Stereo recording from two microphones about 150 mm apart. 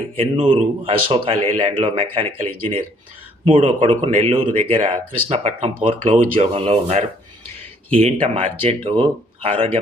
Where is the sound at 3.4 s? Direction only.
35° right (ahead or behind).